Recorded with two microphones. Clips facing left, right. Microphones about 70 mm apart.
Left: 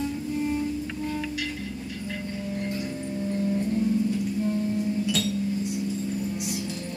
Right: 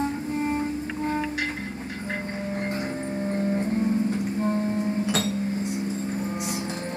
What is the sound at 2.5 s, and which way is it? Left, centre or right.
Music, right.